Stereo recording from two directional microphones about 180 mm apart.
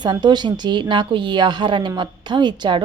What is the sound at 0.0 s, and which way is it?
Speech, 25° right (ahead or behind).